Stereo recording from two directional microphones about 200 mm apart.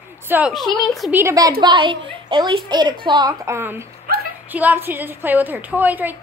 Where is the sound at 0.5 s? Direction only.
Centre (ahead or behind).